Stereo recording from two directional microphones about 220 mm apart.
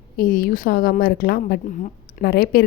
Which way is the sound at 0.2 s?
40° left (ahead or behind).